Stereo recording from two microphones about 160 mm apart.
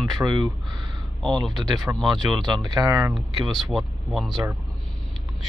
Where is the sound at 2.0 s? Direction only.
Centre (ahead or behind).